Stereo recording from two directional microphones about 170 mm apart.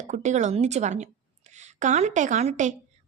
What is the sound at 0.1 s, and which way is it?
A woman's voice, 45° right (ahead or behind).